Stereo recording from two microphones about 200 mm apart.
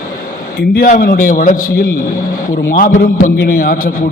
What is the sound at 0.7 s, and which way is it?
Speech, 45° left (ahead or behind).